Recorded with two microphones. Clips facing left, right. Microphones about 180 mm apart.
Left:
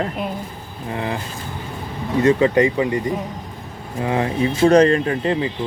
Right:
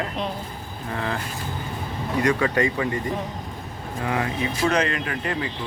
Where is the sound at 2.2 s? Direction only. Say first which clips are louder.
Left 7 dB; 20° left (ahead or behind).